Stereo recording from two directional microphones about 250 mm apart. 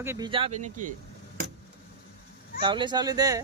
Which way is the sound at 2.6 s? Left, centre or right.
Centre.